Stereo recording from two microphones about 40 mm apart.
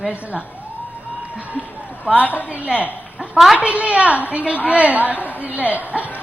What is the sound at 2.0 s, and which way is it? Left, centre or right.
A woman's voice, right.